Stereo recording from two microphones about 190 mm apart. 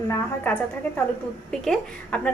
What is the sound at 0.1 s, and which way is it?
A woman's voice, 10° left (ahead or behind).